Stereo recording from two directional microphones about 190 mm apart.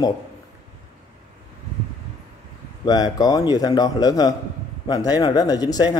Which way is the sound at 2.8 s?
20° left (ahead or behind).